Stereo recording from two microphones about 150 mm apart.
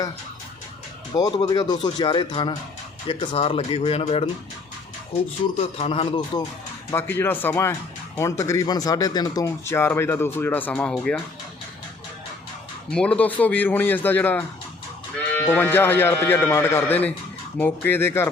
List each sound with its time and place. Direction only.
1.1 s speech: 30° left (ahead or behind)
5.5 s speech: 40° left (ahead or behind)
6.9 s speech: 15° left (ahead or behind)
12.9 s speech: 5° left (ahead or behind)
15.4 s speech: 15° left (ahead or behind)